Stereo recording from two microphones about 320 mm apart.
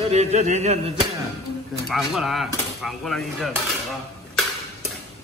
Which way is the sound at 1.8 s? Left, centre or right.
Centre.